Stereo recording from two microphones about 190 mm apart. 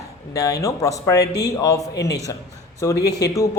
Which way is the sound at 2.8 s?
15° left (ahead or behind).